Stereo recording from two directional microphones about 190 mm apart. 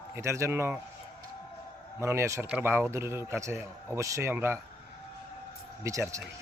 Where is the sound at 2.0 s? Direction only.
15° right (ahead or behind).